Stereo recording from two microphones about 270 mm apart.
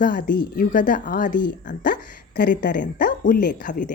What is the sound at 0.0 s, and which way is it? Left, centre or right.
Speech, left.